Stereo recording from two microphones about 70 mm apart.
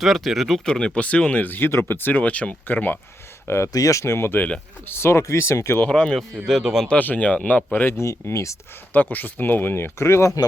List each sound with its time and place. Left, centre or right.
0.0 s speech: centre; by 3.0 s left
3.4 s speech: left
3.7 s speech: left
4.0 s speech: left
4.4 s speech: centre
4.9 s speech: left
5.8 s speech: centre
6.8 s speech: left
7.9 s speech: left
8.9 s speech: left